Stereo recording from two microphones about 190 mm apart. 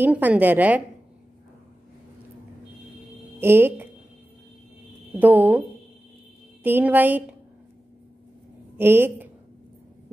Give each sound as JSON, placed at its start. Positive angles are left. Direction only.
{"t": 0.0, "sound": "a woman's voice", "side_deg": -10}
{"t": 3.3, "sound": "speech", "side_deg": -10}
{"t": 5.1, "sound": "a woman's voice", "side_deg": -10}
{"t": 6.6, "sound": "a woman's voice", "side_deg": -10}
{"t": 8.7, "sound": "a woman's voice", "side_deg": -10}